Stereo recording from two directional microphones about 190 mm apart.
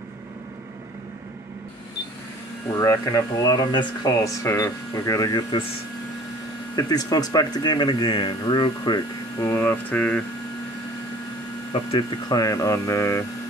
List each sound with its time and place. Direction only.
2.8 s speech: 15° left (ahead or behind)
6.7 s speech: 20° left (ahead or behind)
9.5 s speech: 10° left (ahead or behind)
11.7 s speech: 25° left (ahead or behind)